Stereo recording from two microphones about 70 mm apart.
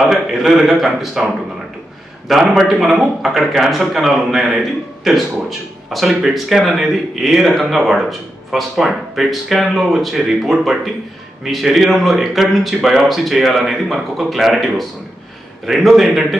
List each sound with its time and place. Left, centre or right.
0.0 s speech: centre
5.9 s speech: centre